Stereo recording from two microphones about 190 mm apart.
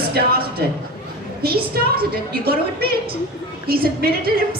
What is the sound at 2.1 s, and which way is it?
A man's voice, 55° right (ahead or behind).